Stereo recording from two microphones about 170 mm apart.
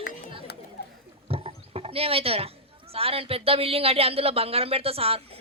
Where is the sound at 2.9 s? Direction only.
35° right (ahead or behind).